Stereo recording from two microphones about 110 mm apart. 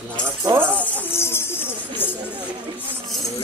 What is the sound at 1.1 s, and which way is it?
Music, 20° left (ahead or behind).